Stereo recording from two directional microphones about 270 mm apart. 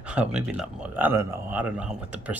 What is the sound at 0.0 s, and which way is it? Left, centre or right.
Speech, centre.